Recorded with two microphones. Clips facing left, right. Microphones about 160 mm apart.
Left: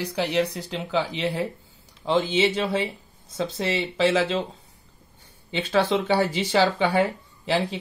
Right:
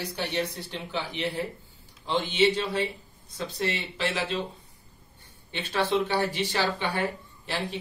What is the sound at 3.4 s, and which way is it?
Speech, 90° left.